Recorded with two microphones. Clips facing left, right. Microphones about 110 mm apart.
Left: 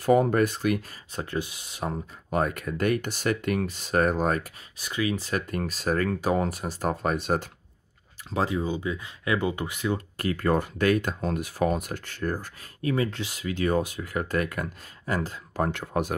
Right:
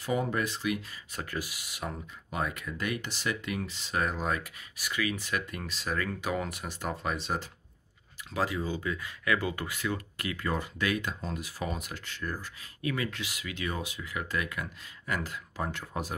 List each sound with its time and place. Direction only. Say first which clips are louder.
0.0 s speech: left 9 dB; 50° left (ahead or behind)
1.1 s speech: left 6 dB; 25° left (ahead or behind)
2.3 s speech: left 7 dB; 50° left (ahead or behind)
4.7 s speech: left 5 dB; 30° left (ahead or behind); by 7.4 s 50° left (ahead or behind)
8.3 s speech: left 4 dB; 25° left (ahead or behind)
10.1 s speech: left 8 dB; 45° left (ahead or behind)
12.9 s speech: left 7 dB; 30° left (ahead or behind); by 16.2 s 60° left (ahead or behind)